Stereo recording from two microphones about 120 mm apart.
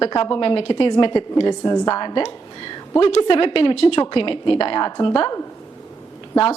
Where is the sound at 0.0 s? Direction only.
45° left (ahead or behind).